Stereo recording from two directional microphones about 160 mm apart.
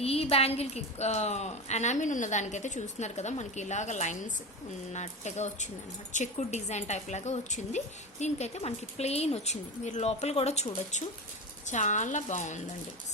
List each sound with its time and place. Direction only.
0.0 s a woman's voice: 40° left (ahead or behind)